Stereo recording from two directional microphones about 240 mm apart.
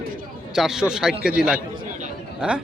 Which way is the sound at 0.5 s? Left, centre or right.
Centre.